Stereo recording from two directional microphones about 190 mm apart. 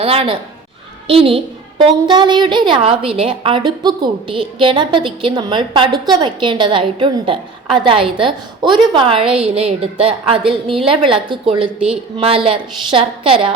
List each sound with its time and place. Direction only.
0.0 s a woman's voice: 30° right (ahead or behind)